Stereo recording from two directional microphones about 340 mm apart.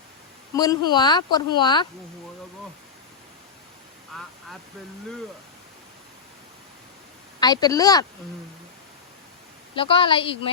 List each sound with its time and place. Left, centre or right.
0.5 s speech: centre
4.1 s speech: centre
7.3 s speech: centre
9.7 s speech: centre